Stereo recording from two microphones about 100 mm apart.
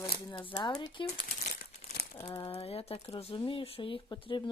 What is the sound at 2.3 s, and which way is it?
Speech, 70° left (ahead or behind).